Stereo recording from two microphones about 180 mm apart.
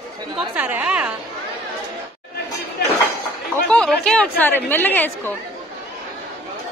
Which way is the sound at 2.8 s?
60° left (ahead or behind).